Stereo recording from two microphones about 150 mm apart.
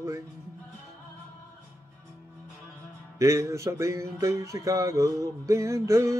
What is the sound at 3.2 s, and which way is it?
Music, 20° right (ahead or behind).